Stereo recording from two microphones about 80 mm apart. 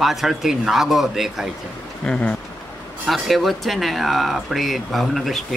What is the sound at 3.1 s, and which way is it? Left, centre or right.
Speech, centre.